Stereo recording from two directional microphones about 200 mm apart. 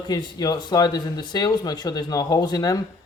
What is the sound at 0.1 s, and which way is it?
Speech, 20° left (ahead or behind).